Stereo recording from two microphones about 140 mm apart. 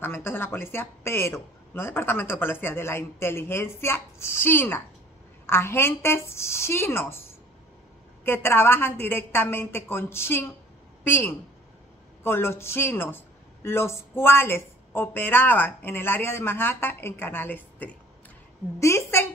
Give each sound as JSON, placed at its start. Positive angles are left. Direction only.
{"t": 0.0, "sound": "speech", "side_deg": 15}
{"t": 8.3, "sound": "a woman's voice", "side_deg": 15}